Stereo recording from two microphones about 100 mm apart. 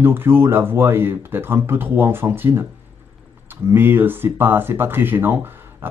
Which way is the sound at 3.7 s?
20° right (ahead or behind).